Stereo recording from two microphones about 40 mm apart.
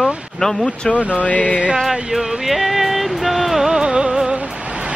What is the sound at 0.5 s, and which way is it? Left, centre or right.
Speech, left.